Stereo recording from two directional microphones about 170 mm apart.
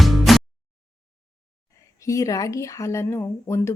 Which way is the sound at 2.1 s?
20° left (ahead or behind).